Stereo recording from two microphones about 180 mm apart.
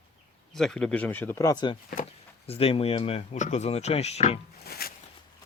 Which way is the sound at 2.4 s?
30° left (ahead or behind).